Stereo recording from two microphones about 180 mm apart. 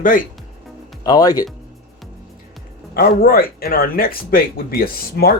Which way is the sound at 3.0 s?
55° left (ahead or behind).